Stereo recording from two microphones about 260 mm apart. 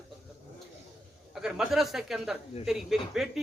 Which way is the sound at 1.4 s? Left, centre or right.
Centre.